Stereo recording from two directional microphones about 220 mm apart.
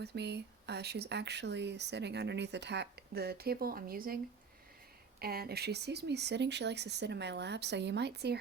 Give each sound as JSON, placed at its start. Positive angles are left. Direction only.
{"t": 0.0, "sound": "speech", "side_deg": -50}
{"t": 5.2, "sound": "speech", "side_deg": -45}